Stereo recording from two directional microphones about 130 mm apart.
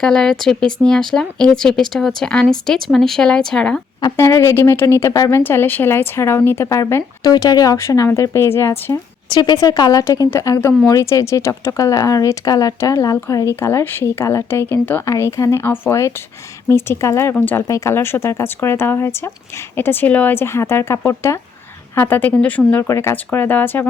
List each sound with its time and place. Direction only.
0.0 s speech: 5° left (ahead or behind)
4.2 s speech: 20° left (ahead or behind)
9.3 s a woman's voice: 35° left (ahead or behind)
10.0 s speech: 20° left (ahead or behind)